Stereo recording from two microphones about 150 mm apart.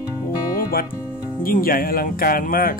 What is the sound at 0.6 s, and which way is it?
Music, 90° left.